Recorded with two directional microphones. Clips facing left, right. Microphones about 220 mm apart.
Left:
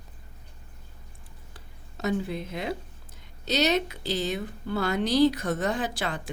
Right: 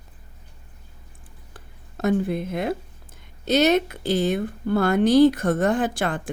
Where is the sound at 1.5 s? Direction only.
50° right (ahead or behind).